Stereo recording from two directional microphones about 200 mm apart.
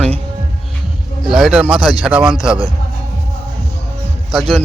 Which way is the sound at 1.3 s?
Centre (ahead or behind).